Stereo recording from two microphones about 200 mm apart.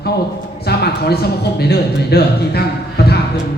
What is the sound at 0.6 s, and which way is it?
A man's voice, 55° left (ahead or behind).